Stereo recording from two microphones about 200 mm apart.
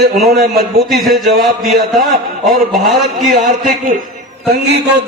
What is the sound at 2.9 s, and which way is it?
Speech, centre (ahead or behind).